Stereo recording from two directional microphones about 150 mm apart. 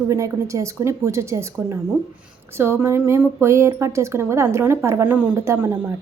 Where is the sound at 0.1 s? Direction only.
20° right (ahead or behind).